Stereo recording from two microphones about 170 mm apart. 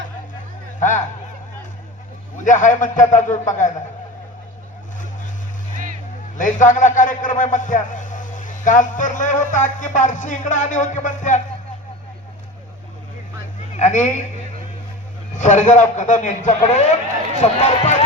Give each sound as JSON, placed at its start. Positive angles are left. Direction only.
{"t": 0.8, "sound": "a sound", "side_deg": 45}
{"t": 2.4, "sound": "a man's voice", "side_deg": 50}
{"t": 6.3, "sound": "a man's voice", "side_deg": 50}
{"t": 13.7, "sound": "a man's voice", "side_deg": 45}
{"t": 15.4, "sound": "a man's voice", "side_deg": 45}